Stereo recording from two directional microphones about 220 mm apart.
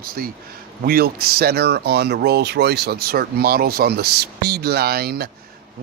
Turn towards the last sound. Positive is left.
turn(degrees=-45)  # may be behind; listen again after turning